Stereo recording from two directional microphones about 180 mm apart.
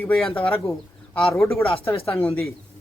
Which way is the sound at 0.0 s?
5° left (ahead or behind).